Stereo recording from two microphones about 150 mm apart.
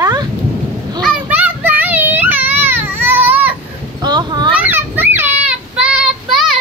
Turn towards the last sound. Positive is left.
turn(degrees=-5)  # may be behind; listen again after turning